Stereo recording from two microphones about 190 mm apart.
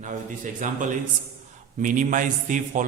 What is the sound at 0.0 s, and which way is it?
A man's voice, 40° right (ahead or behind).